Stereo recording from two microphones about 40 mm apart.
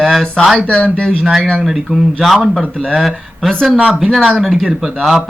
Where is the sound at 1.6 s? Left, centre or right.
Centre.